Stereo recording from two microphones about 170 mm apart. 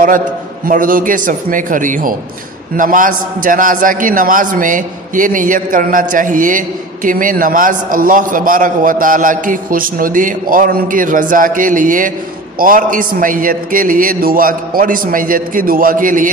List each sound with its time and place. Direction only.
0.7 s a man's voice: 55° right (ahead or behind)